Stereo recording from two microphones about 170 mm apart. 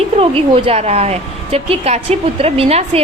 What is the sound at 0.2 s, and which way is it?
A woman's voice, 35° right (ahead or behind).